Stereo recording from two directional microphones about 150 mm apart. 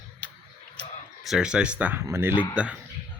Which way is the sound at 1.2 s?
5° right (ahead or behind).